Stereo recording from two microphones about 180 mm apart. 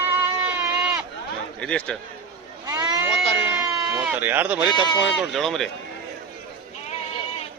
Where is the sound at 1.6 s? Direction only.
5° left (ahead or behind).